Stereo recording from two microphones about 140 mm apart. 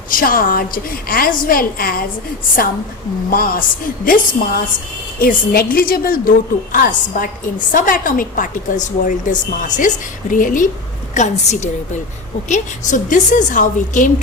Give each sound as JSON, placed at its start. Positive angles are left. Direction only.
{"t": 0.1, "sound": "a woman's voice", "side_deg": 90}
{"t": 3.2, "sound": "a woman's voice", "side_deg": 90}
{"t": 6.7, "sound": "a woman's voice", "side_deg": 75}
{"t": 11.1, "sound": "a woman's voice", "side_deg": 55}